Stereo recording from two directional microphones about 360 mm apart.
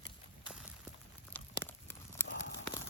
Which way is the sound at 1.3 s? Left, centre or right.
Centre.